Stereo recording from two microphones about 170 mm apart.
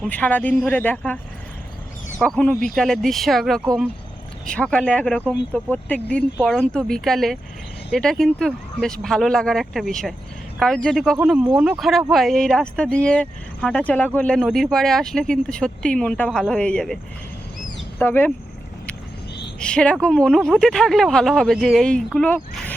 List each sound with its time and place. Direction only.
0.0 s speech: 10° left (ahead or behind)
2.2 s speech: 5° left (ahead or behind)
18.0 s speech: 10° left (ahead or behind)
19.5 s speech: 5° left (ahead or behind)